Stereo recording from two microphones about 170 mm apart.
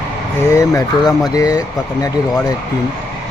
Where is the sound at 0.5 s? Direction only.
20° left (ahead or behind).